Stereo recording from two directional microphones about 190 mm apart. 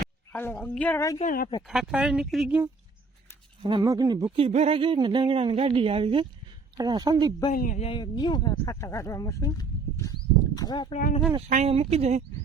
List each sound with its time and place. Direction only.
0.0 s a sound: 5° left (ahead or behind)
1.6 s speech: centre (ahead or behind)
3.6 s speech: 25° right (ahead or behind)
7.5 s a man's voice: 45° left (ahead or behind)
7.9 s speech: 25° left (ahead or behind)
11.3 s speech: 35° right (ahead or behind)